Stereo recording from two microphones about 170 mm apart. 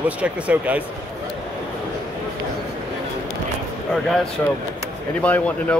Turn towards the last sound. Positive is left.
turn(degrees=10)  # may be behind; listen again after turning